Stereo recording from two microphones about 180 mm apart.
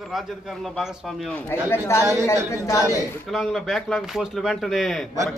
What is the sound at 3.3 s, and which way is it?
A man's voice, centre (ahead or behind).